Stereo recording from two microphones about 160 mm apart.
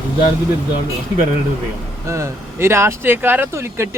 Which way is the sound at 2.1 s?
15° right (ahead or behind).